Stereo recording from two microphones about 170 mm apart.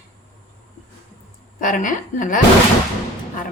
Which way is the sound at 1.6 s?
50° left (ahead or behind).